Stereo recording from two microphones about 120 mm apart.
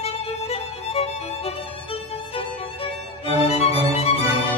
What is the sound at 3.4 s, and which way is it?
Music, 60° left (ahead or behind).